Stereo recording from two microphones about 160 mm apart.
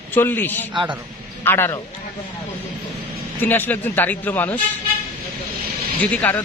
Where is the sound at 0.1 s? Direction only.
10° left (ahead or behind).